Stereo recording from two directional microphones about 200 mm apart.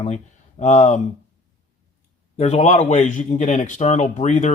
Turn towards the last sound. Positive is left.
turn(degrees=35)  # may be behind; listen again after turning